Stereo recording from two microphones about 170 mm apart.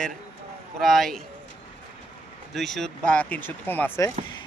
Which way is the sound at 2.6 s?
Centre (ahead or behind).